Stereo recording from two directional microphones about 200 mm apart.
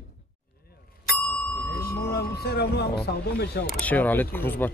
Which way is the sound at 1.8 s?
50° left (ahead or behind).